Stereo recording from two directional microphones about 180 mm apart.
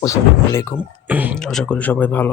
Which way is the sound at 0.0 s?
15° left (ahead or behind).